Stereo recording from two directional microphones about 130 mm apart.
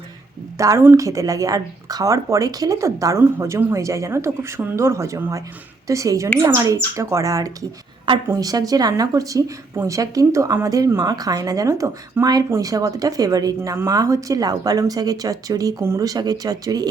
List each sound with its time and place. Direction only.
0.6 s speech: 25° right (ahead or behind)